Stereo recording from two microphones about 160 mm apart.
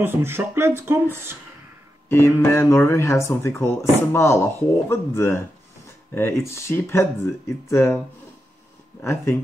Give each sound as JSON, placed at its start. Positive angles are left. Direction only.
{"t": 0.0, "sound": "speech", "side_deg": -15}
{"t": 2.0, "sound": "speech", "side_deg": 15}
{"t": 9.0, "sound": "speech", "side_deg": 15}